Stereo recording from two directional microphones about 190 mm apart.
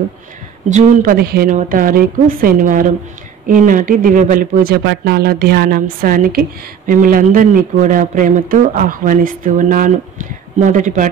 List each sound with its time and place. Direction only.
0.7 s speech: 45° right (ahead or behind)